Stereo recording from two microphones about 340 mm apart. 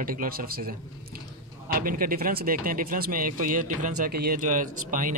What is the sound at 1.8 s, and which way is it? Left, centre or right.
Speech, right.